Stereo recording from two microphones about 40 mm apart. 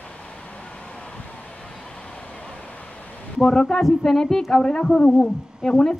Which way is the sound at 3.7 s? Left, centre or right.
Centre.